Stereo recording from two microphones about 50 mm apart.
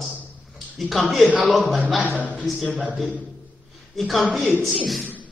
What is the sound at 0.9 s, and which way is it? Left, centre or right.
Speech, centre.